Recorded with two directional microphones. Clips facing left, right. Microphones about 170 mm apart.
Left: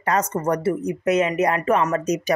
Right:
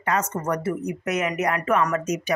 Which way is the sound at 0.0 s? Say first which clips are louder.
Left 3 dB; 35° left (ahead or behind).